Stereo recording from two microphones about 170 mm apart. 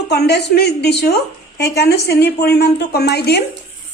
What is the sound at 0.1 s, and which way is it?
A woman's voice, 75° left (ahead or behind).